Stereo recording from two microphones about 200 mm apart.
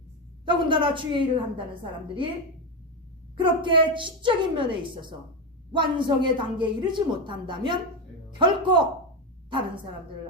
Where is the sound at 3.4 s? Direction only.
25° right (ahead or behind).